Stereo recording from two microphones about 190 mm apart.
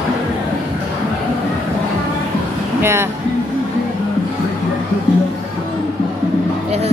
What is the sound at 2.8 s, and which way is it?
Speech, 15° right (ahead or behind).